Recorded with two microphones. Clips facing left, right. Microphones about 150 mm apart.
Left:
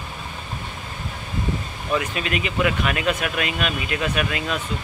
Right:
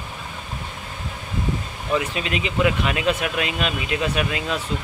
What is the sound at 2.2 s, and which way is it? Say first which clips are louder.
Speech: right 1 dB; 25° right (ahead or behind).